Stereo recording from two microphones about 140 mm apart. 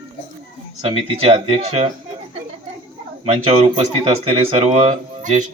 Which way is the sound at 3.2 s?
45° right (ahead or behind).